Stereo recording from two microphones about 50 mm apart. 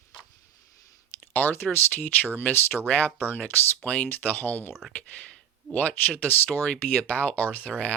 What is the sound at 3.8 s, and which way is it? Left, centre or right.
Speech, left.